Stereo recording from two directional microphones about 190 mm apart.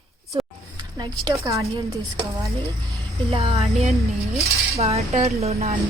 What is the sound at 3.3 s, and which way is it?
Speech, 30° right (ahead or behind).